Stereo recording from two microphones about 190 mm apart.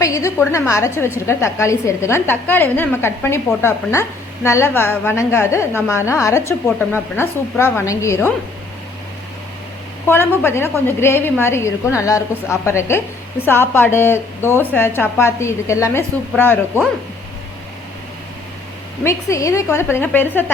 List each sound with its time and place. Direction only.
0.0 s a woman's voice: 15° left (ahead or behind)
10.4 s a woman's voice: 10° left (ahead or behind)
19.0 s a woman's voice: 15° left (ahead or behind)